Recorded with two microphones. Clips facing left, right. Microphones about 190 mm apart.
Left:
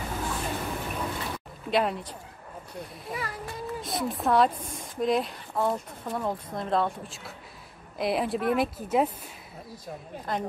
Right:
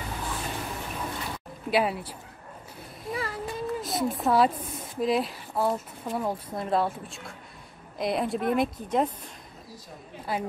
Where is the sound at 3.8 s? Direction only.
Centre (ahead or behind).